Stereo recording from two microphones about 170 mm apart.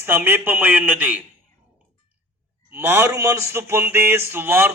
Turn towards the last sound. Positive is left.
turn(degrees=-10)  # may be behind; listen again after turning